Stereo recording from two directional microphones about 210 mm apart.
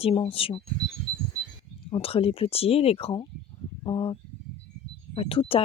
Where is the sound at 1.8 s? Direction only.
25° left (ahead or behind).